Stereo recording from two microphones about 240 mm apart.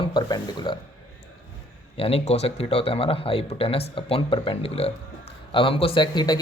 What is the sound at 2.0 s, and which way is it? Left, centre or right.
Speech, left.